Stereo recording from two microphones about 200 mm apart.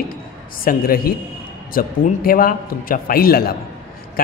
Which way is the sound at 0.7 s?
45° left (ahead or behind).